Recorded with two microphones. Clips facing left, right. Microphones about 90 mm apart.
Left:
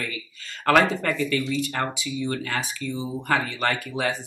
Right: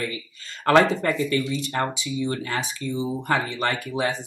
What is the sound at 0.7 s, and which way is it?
Speech, 25° right (ahead or behind).